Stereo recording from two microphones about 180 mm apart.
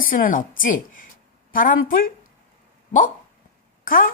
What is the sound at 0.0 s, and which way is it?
A woman's voice, 50° left (ahead or behind).